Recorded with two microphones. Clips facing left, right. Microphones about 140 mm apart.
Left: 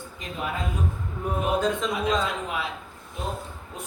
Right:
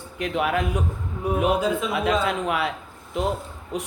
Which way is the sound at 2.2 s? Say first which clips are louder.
Right 5 dB; 65° right (ahead or behind).